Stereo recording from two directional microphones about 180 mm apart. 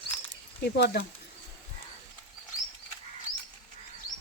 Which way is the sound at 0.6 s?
65° left (ahead or behind).